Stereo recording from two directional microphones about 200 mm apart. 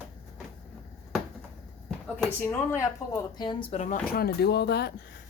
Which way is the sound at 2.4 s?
15° left (ahead or behind).